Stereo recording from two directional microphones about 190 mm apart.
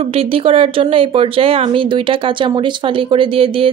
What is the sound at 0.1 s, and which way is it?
Speech, 30° right (ahead or behind).